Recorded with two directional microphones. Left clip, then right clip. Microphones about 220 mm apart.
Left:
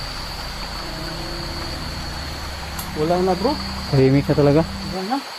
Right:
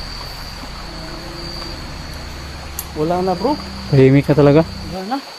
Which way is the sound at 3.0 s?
45° right (ahead or behind).